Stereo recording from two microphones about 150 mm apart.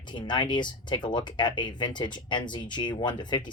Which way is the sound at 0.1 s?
30° left (ahead or behind).